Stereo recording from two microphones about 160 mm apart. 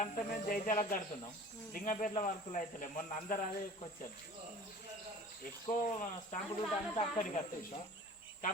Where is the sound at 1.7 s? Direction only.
55° left (ahead or behind).